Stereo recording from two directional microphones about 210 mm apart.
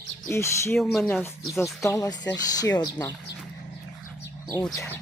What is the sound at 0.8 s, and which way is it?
Speech, centre (ahead or behind).